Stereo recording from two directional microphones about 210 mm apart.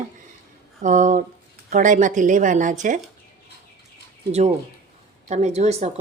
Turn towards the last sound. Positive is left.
turn(degrees=-30)  # may be behind; listen again after turning